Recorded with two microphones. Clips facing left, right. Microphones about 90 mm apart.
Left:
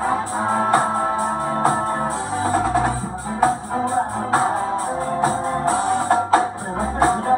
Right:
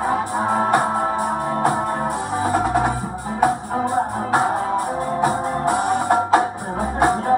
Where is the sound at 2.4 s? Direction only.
15° right (ahead or behind).